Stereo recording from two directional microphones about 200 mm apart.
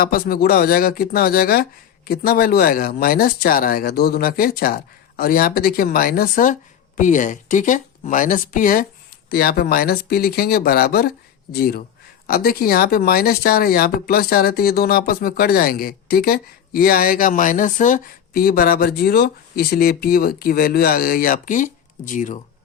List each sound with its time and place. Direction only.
0.0 s speech: 45° left (ahead or behind)